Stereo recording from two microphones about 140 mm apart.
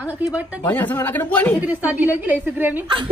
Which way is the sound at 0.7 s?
10° left (ahead or behind).